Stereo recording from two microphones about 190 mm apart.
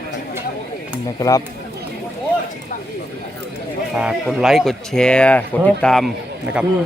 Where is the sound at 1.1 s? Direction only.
20° left (ahead or behind).